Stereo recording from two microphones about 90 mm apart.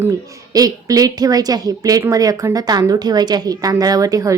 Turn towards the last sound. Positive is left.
turn(degrees=-40)  # may be behind; listen again after turning